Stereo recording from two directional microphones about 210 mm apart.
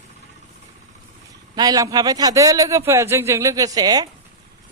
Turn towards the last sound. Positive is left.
turn(degrees=-20)  # may be behind; listen again after turning